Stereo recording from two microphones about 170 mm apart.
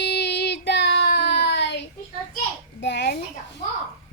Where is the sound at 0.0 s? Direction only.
80° left.